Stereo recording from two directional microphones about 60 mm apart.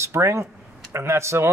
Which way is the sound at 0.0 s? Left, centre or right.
Right.